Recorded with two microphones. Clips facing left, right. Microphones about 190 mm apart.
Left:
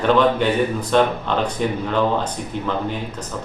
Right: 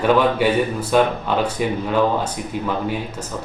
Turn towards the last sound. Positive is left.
turn(degrees=-10)  # may be behind; listen again after turning